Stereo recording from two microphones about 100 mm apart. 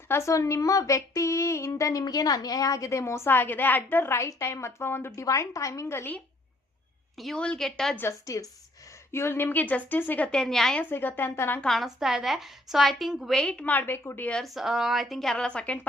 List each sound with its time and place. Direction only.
0.1 s a woman's voice: 30° left (ahead or behind)
7.2 s a woman's voice: 5° left (ahead or behind)
8.2 s a woman's voice: 35° left (ahead or behind); by 10.2 s 20° left (ahead or behind)
10.3 s a woman's voice: 5° left (ahead or behind)
10.8 s speech: 20° left (ahead or behind)
11.6 s a woman's voice: centre (ahead or behind); by 14.3 s 25° left (ahead or behind)
14.3 s a woman's voice: 5° left (ahead or behind)